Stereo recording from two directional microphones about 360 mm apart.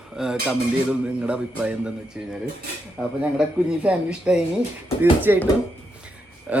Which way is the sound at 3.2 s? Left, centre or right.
Centre.